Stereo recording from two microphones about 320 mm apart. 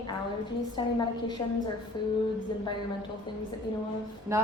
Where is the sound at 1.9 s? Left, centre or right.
Centre.